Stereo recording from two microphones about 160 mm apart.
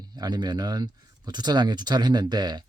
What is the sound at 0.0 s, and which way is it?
Speech, 25° right (ahead or behind).